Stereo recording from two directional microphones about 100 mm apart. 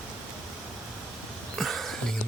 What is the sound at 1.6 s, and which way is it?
Music, centre (ahead or behind).